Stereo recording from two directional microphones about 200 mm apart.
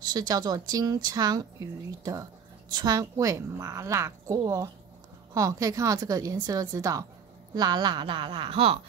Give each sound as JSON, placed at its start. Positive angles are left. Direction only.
{"t": 0.1, "sound": "a woman's voice", "side_deg": -20}